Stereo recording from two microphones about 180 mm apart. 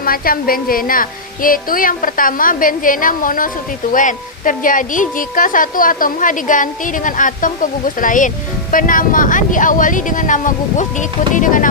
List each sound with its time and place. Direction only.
0.0 s a woman's voice: 55° left (ahead or behind)